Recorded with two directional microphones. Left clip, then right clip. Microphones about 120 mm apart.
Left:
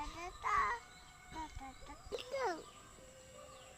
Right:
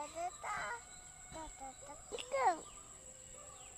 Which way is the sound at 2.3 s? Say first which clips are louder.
Right 6 dB; 35° right (ahead or behind).